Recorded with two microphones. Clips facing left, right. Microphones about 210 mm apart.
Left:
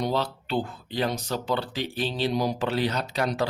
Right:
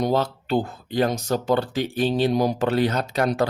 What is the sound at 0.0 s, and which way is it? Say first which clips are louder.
Speech: right 5 dB; 45° right (ahead or behind).